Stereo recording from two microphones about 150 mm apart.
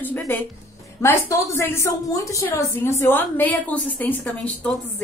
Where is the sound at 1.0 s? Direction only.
20° left (ahead or behind).